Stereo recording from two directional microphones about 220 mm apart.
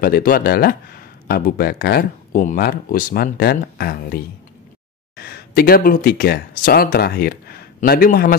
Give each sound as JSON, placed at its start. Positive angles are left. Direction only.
{"t": 0.0, "sound": "speech", "side_deg": 40}